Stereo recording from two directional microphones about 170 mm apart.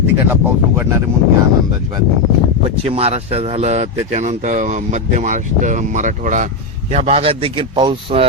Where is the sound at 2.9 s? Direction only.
35° right (ahead or behind).